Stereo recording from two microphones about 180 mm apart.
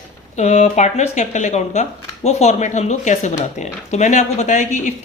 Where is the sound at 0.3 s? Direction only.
40° left (ahead or behind).